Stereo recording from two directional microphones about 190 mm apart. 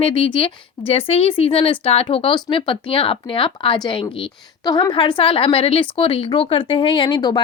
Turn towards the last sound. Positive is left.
turn(degrees=25)  # may be behind; listen again after turning